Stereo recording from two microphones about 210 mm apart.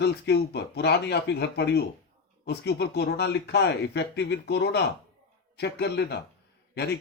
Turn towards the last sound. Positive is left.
turn(degrees=50)  # may be behind; listen again after turning